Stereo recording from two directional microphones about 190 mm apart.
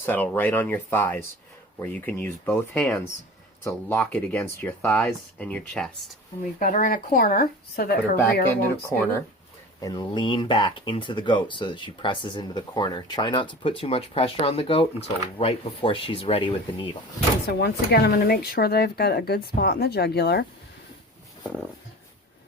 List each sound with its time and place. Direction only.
0.0 s speech: 10° left (ahead or behind)
6.6 s speech: 45° left (ahead or behind)
8.9 s speech: 10° left (ahead or behind)
9.8 s speech: 25° left (ahead or behind)
17.6 s speech: 55° left (ahead or behind)